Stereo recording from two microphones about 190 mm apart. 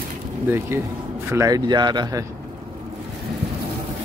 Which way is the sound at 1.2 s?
15° right (ahead or behind).